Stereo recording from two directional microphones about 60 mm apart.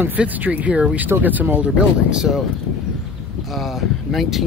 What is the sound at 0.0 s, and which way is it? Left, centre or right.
Speech, right.